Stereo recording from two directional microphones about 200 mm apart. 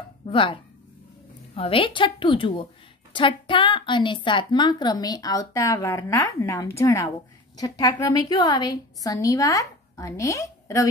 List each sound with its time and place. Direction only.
0.3 s a woman's voice: 25° left (ahead or behind)